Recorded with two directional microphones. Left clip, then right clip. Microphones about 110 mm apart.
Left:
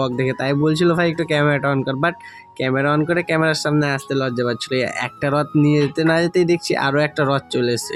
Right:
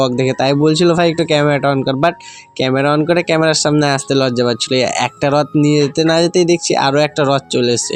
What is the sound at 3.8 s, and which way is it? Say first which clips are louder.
Speech: right 6 dB; 45° right (ahead or behind).